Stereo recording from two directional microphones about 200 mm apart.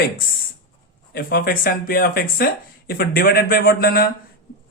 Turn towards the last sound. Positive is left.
turn(degrees=50)  # may be behind; listen again after turning